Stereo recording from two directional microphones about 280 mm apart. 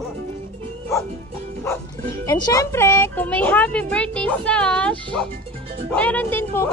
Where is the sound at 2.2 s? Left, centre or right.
Centre.